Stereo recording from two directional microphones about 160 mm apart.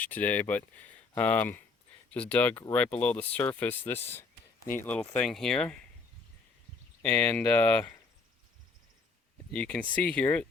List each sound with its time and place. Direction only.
0.0 s speech: 10° left (ahead or behind)
4.1 s a sound: 15° left (ahead or behind)
4.8 s speech: 10° left (ahead or behind)
7.3 s speech: 10° left (ahead or behind)
9.5 s speech: 5° left (ahead or behind)